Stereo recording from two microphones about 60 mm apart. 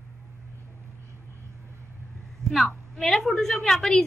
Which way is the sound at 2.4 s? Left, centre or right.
Right.